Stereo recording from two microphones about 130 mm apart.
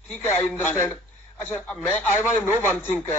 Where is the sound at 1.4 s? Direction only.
10° left (ahead or behind).